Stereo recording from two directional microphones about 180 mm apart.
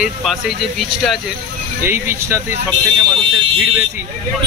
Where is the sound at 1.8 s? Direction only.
15° right (ahead or behind).